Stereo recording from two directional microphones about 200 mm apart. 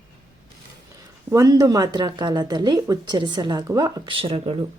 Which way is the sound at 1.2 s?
15° right (ahead or behind).